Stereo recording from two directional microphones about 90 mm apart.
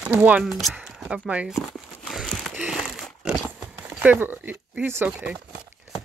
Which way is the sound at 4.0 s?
20° right (ahead or behind).